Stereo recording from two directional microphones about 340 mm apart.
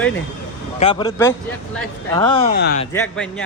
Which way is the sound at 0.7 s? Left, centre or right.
Centre.